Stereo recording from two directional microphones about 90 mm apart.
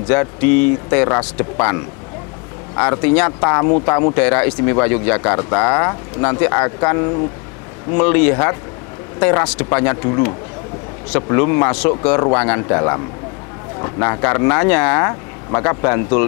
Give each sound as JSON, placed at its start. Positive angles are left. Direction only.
{"t": 0.1, "sound": "speech", "side_deg": 15}